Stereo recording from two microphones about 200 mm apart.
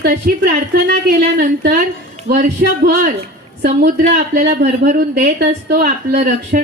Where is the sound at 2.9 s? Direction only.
45° right (ahead or behind).